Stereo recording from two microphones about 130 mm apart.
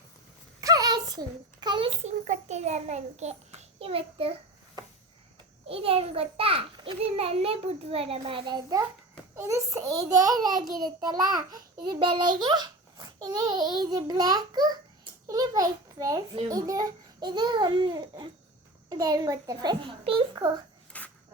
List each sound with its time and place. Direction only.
0.6 s a sound: 30° right (ahead or behind)
1.6 s a child's voice: 35° right (ahead or behind)
2.2 s a child's voice: 65° right (ahead or behind); by 4.4 s 45° right (ahead or behind)
5.6 s a child's voice: 45° right (ahead or behind)
9.3 s a child's voice: 25° right (ahead or behind); by 20.5 s 40° right (ahead or behind)
20.9 s a sound: 10° left (ahead or behind)